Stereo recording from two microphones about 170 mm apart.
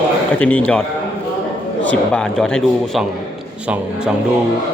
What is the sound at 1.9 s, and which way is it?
A man's voice, 5° left (ahead or behind).